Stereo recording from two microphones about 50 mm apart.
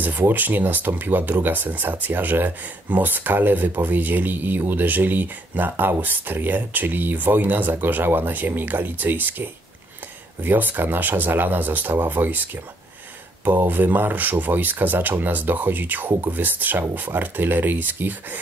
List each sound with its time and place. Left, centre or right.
0.0 s speech: right
13.7 s speech: right